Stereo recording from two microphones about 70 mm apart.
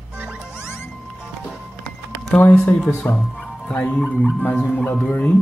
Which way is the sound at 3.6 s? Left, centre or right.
Centre.